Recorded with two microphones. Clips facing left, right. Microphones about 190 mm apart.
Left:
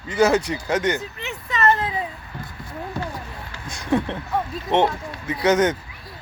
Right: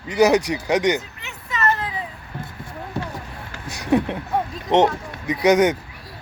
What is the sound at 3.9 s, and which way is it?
Speech, 15° right (ahead or behind).